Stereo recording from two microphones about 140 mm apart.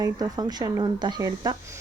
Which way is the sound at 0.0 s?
30° right (ahead or behind).